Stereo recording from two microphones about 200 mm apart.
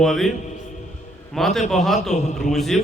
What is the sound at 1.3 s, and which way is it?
A man's voice, centre (ahead or behind).